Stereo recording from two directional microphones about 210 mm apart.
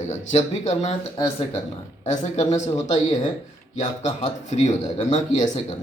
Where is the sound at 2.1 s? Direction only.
30° left (ahead or behind).